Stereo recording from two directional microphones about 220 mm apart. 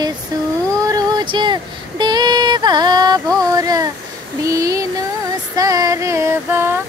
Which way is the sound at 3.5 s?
15° right (ahead or behind).